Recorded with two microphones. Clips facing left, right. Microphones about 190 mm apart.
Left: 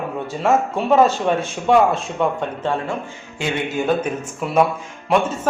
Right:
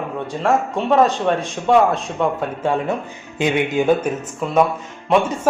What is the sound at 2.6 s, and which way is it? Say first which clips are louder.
Speech: right 3 dB; 15° right (ahead or behind).